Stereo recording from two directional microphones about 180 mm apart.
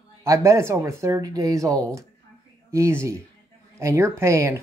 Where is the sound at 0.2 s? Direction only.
15° right (ahead or behind).